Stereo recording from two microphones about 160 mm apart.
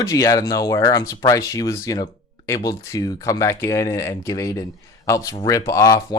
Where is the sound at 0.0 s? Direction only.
20° left (ahead or behind).